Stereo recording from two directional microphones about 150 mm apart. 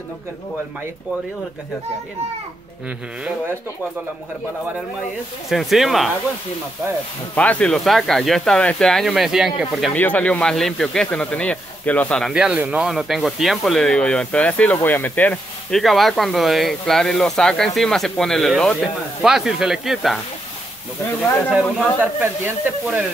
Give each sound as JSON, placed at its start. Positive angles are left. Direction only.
{"t": 5.5, "sound": "speech", "side_deg": 0}
{"t": 7.3, "sound": "speech", "side_deg": 10}
{"t": 9.9, "sound": "speech", "side_deg": 10}
{"t": 21.5, "sound": "speech", "side_deg": -5}